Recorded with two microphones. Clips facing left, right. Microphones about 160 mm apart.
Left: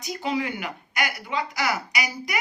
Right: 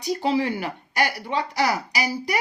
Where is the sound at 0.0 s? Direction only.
30° right (ahead or behind).